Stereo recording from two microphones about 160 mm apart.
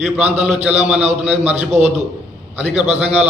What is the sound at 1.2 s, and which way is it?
Speech, 10° right (ahead or behind).